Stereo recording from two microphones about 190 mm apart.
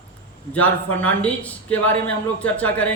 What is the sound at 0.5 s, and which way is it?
Speech, 10° left (ahead or behind).